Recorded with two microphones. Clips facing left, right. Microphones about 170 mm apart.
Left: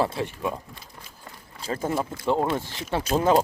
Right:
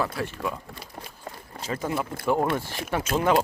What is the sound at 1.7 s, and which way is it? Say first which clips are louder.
Speech: left 2 dB; 30° left (ahead or behind).